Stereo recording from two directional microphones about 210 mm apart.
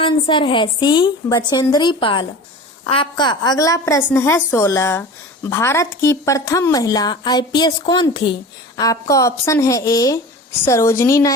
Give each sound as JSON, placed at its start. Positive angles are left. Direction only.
{"t": 0.0, "sound": "a woman's voice", "side_deg": 25}